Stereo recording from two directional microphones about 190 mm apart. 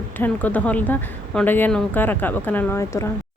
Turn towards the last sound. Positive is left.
turn(degrees=15)  # may be behind; listen again after turning